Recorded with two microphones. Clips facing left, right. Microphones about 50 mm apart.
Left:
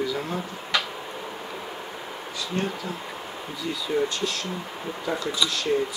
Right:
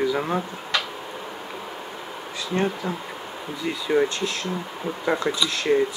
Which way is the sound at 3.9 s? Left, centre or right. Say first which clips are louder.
Right 4 dB; right.